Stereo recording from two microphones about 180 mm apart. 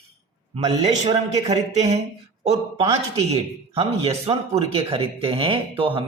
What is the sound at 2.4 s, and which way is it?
A man's voice, 30° right (ahead or behind).